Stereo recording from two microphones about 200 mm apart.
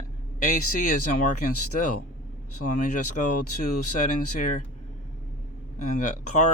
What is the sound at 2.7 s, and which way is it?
Speech, 40° left (ahead or behind).